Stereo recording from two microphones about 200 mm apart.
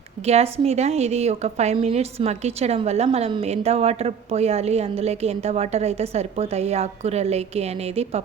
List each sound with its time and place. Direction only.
0.3 s a woman's voice: 30° right (ahead or behind)